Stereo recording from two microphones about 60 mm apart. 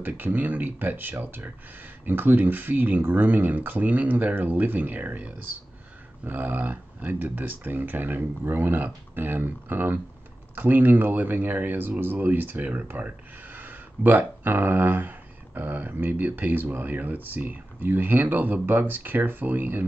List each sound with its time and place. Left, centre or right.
0.0 s speech: right